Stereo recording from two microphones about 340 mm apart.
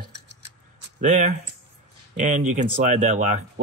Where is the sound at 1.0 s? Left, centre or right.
Right.